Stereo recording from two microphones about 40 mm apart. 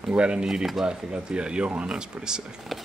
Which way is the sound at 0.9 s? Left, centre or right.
Right.